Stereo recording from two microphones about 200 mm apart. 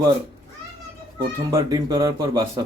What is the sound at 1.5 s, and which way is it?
Speech, 15° right (ahead or behind).